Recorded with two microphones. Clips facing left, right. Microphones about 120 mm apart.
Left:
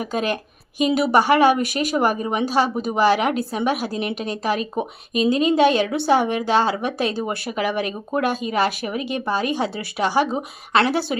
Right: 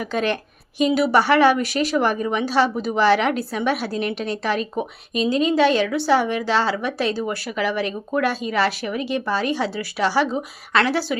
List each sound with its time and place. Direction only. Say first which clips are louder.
0.0 s a woman's voice: right 1 dB; 15° left (ahead or behind)